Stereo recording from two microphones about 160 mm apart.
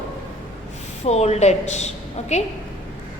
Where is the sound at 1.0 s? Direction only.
40° left (ahead or behind).